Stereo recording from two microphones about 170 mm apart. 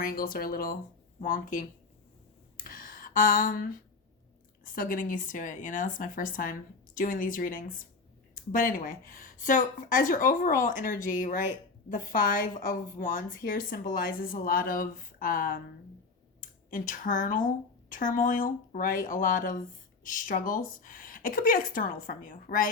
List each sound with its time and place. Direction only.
0.0 s a woman's voice: 55° left (ahead or behind)
2.6 s a sound: 55° left (ahead or behind)
4.6 s a woman's voice: 55° left (ahead or behind)